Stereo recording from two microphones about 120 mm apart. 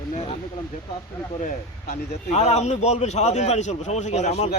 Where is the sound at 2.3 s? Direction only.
65° left (ahead or behind).